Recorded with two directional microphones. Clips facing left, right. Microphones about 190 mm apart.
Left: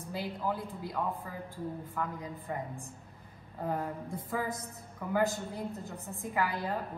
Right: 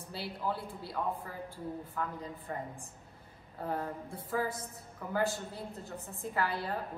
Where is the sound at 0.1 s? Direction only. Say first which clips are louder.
Left 2 dB; 15° left (ahead or behind).